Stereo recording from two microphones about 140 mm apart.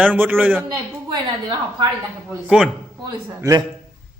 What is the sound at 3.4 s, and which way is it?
Speech, 25° right (ahead or behind).